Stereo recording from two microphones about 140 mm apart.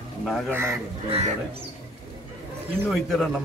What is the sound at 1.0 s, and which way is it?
Speech, 45° right (ahead or behind).